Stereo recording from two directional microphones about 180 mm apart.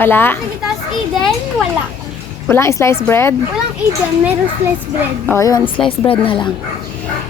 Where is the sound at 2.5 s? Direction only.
15° left (ahead or behind).